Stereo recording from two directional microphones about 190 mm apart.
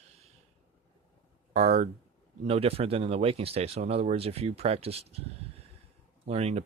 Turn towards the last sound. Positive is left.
turn(degrees=-35)  # may be behind; listen again after turning